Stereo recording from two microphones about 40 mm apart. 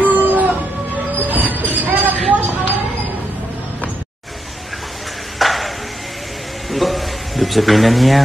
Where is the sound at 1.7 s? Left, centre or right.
Right.